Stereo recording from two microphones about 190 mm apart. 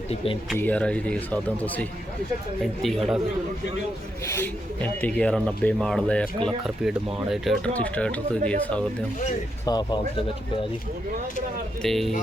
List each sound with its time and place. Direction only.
0.5 s speech: 10° left (ahead or behind)
4.8 s speech: 10° left (ahead or behind)
9.6 s speech: 20° left (ahead or behind)
11.8 s speech: centre (ahead or behind)